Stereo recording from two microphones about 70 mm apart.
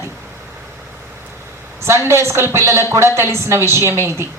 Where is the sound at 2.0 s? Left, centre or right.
Right.